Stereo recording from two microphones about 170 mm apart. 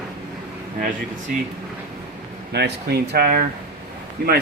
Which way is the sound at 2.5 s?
75° right (ahead or behind).